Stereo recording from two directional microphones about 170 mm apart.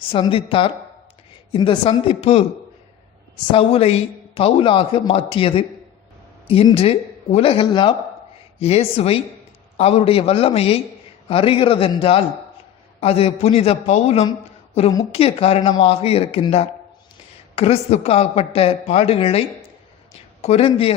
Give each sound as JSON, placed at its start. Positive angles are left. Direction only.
{"t": 0.1, "sound": "a man's voice", "side_deg": 30}
{"t": 3.5, "sound": "a man's voice", "side_deg": 35}